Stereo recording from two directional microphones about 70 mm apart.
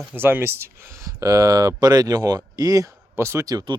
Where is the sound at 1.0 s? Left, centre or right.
Right.